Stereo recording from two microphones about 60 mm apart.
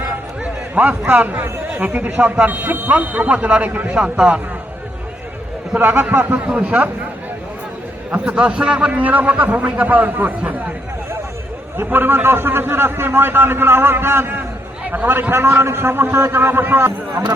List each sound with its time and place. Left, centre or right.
0.8 s a man's voice: right
5.8 s a man's voice: right
8.1 s a man's voice: right
11.8 s a man's voice: right